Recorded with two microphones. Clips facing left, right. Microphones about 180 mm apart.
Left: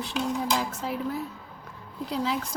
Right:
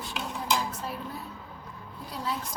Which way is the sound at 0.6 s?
90° left.